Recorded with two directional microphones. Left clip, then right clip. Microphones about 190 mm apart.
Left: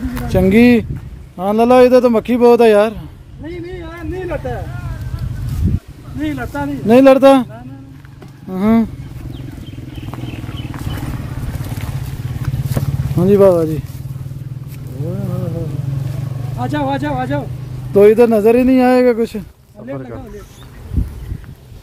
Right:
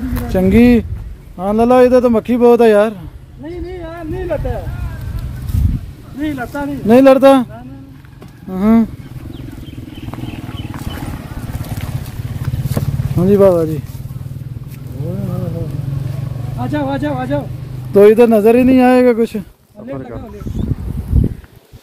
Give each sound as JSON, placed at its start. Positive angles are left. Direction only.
{"t": 0.3, "sound": "a man's voice", "side_deg": 20}
{"t": 3.4, "sound": "a sound", "side_deg": 5}
{"t": 6.1, "sound": "speech", "side_deg": 10}
{"t": 8.5, "sound": "speech", "side_deg": 10}
{"t": 13.2, "sound": "speech", "side_deg": 15}
{"t": 16.6, "sound": "a man's voice", "side_deg": 25}
{"t": 17.9, "sound": "speech", "side_deg": -10}